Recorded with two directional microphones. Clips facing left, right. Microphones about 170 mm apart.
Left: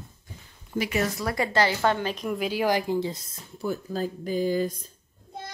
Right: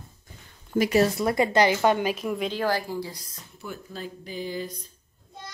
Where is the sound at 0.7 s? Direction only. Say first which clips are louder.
Right 6 dB; 40° right (ahead or behind).